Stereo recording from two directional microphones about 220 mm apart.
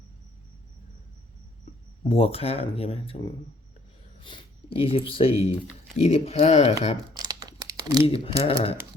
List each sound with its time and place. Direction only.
2.0 s speech: 25° left (ahead or behind)
6.9 s crumpling: 15° right (ahead or behind)
8.0 s speech: 25° left (ahead or behind)